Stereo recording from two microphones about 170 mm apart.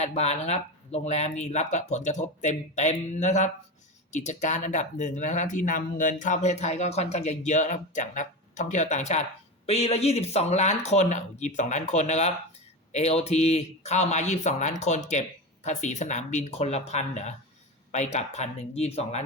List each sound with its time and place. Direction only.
0.0 s speech: 40° left (ahead or behind)